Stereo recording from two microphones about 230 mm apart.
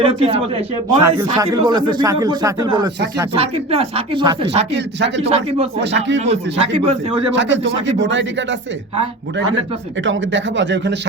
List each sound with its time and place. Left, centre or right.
0.0 s speech: right
4.7 s speech: right
5.3 s speech: right
5.8 s speech: right
6.1 s speech: right
7.3 s speech: right
10.0 s speech: right